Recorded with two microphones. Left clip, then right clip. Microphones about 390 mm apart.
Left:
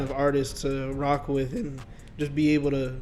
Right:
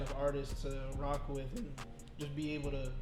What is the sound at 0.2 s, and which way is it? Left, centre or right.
Speech, left.